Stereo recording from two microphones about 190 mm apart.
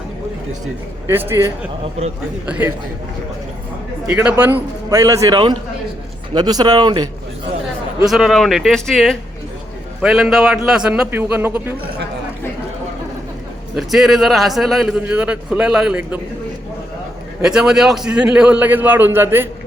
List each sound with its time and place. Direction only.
1.0 s a man's voice: 10° right (ahead or behind)
4.0 s a man's voice: 5° right (ahead or behind)
8.0 s a man's voice: centre (ahead or behind)
13.7 s a man's voice: centre (ahead or behind)
17.4 s a man's voice: 5° right (ahead or behind)